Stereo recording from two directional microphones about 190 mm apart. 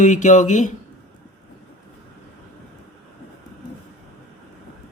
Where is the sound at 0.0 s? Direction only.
40° left (ahead or behind).